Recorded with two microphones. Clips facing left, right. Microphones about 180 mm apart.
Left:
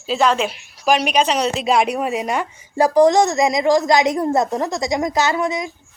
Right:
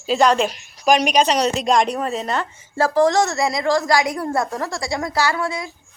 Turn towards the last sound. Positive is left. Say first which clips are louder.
# left 3 dB
turn(degrees=20)  # may be behind; listen again after turning